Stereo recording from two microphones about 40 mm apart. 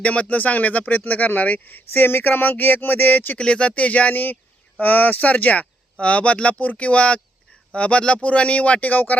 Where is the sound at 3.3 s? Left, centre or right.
Left.